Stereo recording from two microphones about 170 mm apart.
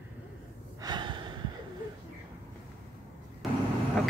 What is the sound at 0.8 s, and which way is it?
Breathing, 25° right (ahead or behind).